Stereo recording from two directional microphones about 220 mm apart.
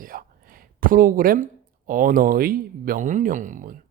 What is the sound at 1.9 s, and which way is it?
Speech, 40° right (ahead or behind).